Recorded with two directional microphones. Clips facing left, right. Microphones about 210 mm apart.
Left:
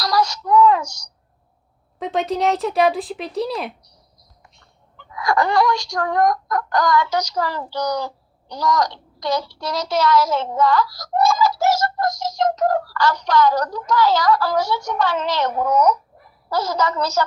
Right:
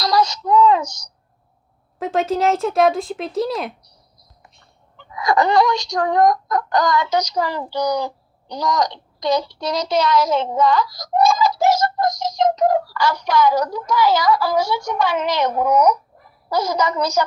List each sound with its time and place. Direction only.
0.0 s child singing: 20° right (ahead or behind)
2.0 s speech: centre (ahead or behind)
4.9 s speech: 20° right (ahead or behind)